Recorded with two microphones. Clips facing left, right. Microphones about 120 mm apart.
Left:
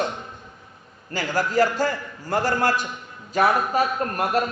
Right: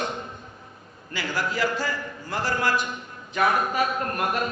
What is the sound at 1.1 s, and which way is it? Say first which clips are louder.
A man's voice: left 7 dB; 45° left (ahead or behind).